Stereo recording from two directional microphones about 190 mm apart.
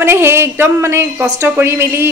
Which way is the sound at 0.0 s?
10° right (ahead or behind).